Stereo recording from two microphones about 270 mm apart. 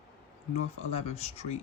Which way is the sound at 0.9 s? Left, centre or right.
Left.